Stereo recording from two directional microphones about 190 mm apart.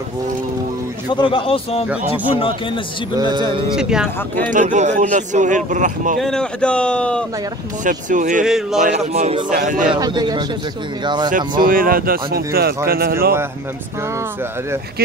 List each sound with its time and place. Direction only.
1.1 s speech: 25° left (ahead or behind)
3.2 s speech: 25° right (ahead or behind)
3.7 s speech: 5° right (ahead or behind)
4.5 s a man's voice: 40° right (ahead or behind)
6.1 s speech: 5° left (ahead or behind)
7.8 s a man's voice: 40° right (ahead or behind)
8.5 s speech: centre (ahead or behind)
8.8 s a man's voice: 35° right (ahead or behind)
9.9 s speech: 20° right (ahead or behind)
11.2 s speech: 45° right (ahead or behind)